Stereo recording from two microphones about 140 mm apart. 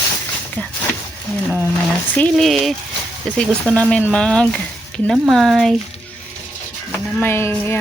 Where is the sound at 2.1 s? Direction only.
5° left (ahead or behind).